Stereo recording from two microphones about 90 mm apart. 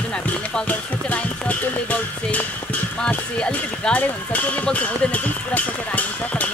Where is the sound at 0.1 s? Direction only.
10° left (ahead or behind).